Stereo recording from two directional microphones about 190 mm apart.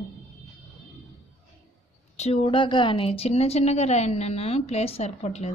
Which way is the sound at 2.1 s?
35° left (ahead or behind).